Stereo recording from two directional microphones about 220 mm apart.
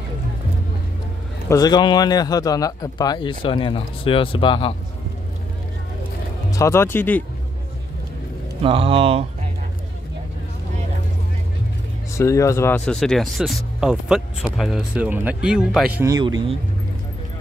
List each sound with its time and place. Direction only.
1.5 s speech: 20° left (ahead or behind)
6.5 s speech: 15° left (ahead or behind)
8.6 s speech: 25° right (ahead or behind)
12.1 s speech: 15° left (ahead or behind); by 16.1 s 5° right (ahead or behind)